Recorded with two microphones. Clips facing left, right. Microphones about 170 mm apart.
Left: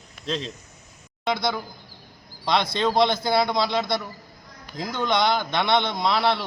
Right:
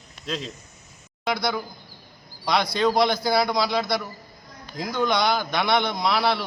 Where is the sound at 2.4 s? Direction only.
25° left (ahead or behind).